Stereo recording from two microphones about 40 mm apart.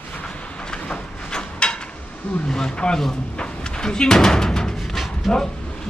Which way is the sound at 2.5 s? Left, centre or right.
Left.